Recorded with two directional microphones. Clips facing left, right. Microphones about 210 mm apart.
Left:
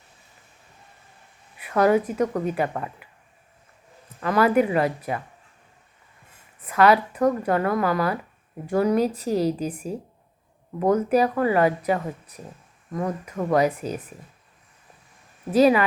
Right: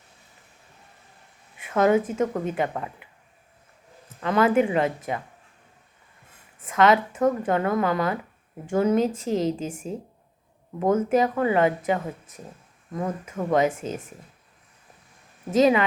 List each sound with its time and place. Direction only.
1.5 s a woman's voice: 25° right (ahead or behind)
4.2 s a woman's voice: 25° right (ahead or behind)
6.7 s a woman's voice: 20° right (ahead or behind)
12.9 s a woman's voice: 20° right (ahead or behind)
15.4 s a woman's voice: 25° right (ahead or behind)